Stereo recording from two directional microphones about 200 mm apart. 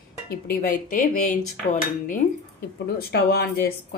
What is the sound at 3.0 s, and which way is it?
Speech, 55° left (ahead or behind).